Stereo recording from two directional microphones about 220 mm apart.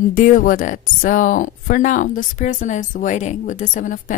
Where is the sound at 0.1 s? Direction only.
40° left (ahead or behind).